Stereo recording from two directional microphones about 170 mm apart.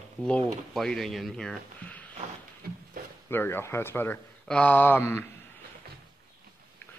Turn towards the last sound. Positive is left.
turn(degrees=15)  # may be behind; listen again after turning